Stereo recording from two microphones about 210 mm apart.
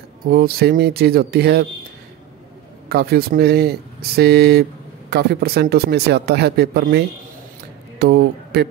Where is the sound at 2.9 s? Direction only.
50° right (ahead or behind).